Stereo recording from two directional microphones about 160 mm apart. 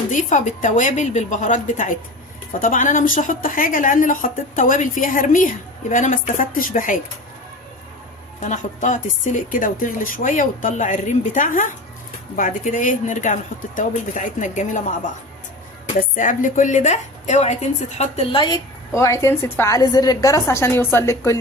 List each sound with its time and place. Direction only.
0.1 s a woman's voice: 50° left (ahead or behind)
8.4 s a woman's voice: 50° left (ahead or behind)
16.0 s a woman's voice: 55° left (ahead or behind); by 21.3 s 15° left (ahead or behind)